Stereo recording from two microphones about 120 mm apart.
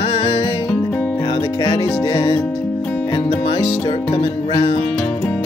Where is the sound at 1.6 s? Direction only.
45° left (ahead or behind).